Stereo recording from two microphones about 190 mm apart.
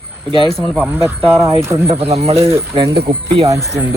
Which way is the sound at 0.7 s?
10° right (ahead or behind).